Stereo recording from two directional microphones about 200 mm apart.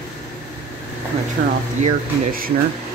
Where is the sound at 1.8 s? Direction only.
45° right (ahead or behind).